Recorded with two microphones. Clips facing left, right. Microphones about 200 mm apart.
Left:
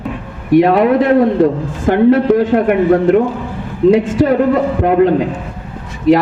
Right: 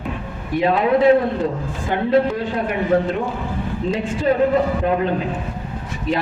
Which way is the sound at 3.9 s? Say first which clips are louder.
Left 8 dB; 80° left.